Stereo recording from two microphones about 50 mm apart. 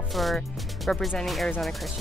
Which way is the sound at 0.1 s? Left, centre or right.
Centre.